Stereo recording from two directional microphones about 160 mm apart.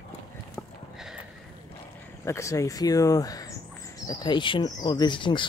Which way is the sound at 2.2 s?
20° left (ahead or behind).